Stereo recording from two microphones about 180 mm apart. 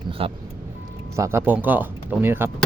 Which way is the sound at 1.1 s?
15° right (ahead or behind).